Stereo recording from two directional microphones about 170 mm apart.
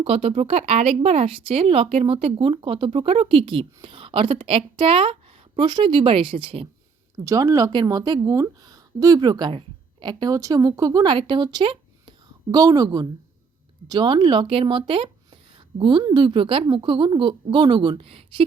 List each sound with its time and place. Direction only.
0.0 s speech: 35° right (ahead or behind)
7.3 s a woman's voice: 20° right (ahead or behind)